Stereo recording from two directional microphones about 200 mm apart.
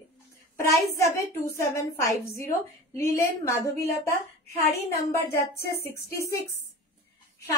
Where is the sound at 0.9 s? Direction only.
15° left (ahead or behind).